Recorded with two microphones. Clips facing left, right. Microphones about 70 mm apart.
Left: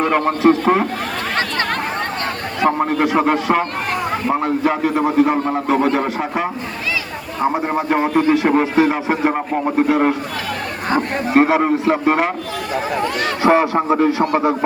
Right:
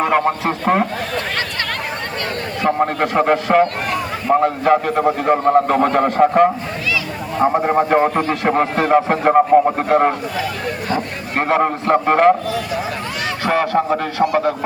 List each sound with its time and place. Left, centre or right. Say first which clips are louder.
0.0 s a man's voice: left 2 dB; centre
2.6 s a man's voice: left 1 dB; centre
7.5 s a man's voice: right 5 dB; centre
11.3 s a man's voice: left 2 dB; centre
13.4 s a man's voice: left 3 dB; left